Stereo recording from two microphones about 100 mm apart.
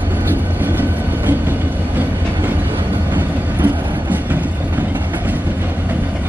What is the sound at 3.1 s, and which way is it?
Train, 20° right (ahead or behind).